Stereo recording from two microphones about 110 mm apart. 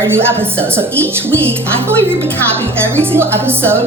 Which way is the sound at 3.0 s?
20° right (ahead or behind).